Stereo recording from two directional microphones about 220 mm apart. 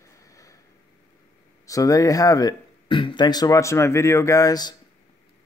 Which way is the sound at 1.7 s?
15° left (ahead or behind).